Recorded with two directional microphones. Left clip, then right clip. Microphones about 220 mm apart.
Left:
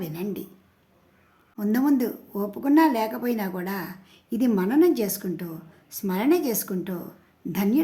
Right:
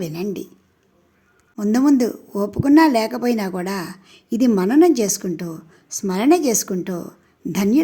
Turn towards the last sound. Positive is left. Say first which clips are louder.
# right 6 dB
turn(degrees=-25)  # may be behind; listen again after turning